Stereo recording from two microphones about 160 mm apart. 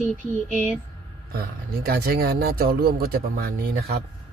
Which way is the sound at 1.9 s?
70° right (ahead or behind).